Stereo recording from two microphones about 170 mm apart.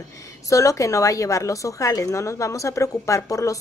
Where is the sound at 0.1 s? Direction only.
20° left (ahead or behind).